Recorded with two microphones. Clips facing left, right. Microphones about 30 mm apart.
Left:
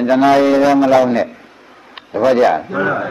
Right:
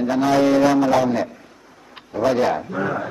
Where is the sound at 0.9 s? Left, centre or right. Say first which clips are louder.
Left 6 dB; left.